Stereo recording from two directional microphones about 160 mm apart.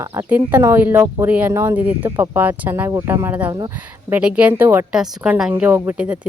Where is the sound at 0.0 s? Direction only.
15° right (ahead or behind).